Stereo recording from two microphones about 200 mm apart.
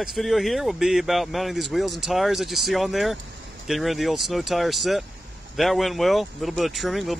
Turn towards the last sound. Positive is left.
turn(degrees=0)  # may be behind; listen again after turning